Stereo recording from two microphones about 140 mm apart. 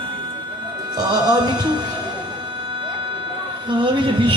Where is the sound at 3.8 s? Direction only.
35° right (ahead or behind).